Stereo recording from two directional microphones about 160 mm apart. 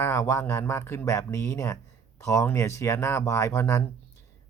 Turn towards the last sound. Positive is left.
turn(degrees=20)  # may be behind; listen again after turning